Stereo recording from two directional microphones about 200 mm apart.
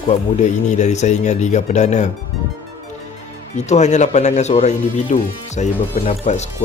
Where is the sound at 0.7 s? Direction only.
35° left (ahead or behind).